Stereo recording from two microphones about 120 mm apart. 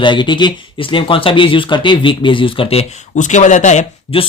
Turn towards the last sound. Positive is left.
turn(degrees=55)  # may be behind; listen again after turning